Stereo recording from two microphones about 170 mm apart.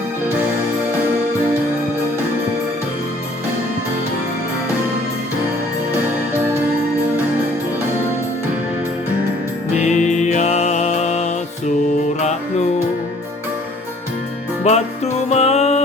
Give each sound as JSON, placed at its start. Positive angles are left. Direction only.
{"t": 9.7, "sound": "music", "side_deg": 45}
{"t": 14.6, "sound": "music", "side_deg": 40}